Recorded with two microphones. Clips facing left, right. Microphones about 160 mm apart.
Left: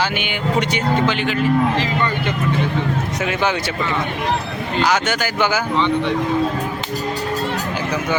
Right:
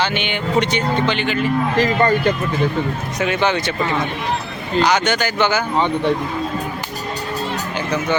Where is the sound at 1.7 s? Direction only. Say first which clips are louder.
Right 5 dB; 45° right (ahead or behind).